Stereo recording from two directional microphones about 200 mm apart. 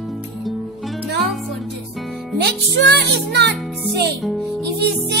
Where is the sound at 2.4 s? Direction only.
55° right (ahead or behind).